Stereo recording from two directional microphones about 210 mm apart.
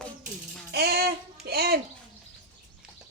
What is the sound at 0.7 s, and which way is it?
A child's voice, 50° right (ahead or behind).